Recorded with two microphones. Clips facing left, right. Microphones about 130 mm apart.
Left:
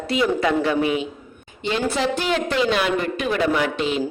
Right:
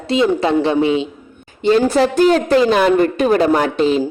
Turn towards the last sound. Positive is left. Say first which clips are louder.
# right 7 dB
turn(degrees=-35)  # may be behind; listen again after turning